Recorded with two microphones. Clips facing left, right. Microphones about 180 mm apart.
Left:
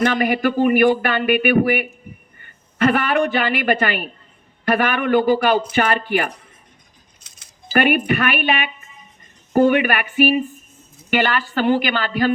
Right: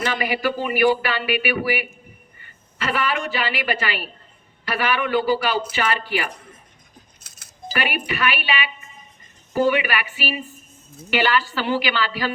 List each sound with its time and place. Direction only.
0.0 s a woman's voice: 50° left (ahead or behind)
7.8 s speech: 50° left (ahead or behind)